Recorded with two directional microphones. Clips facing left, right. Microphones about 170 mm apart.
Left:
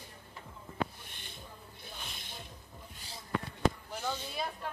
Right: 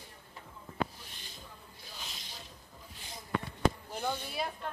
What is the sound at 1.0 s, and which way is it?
Music, 60° left (ahead or behind).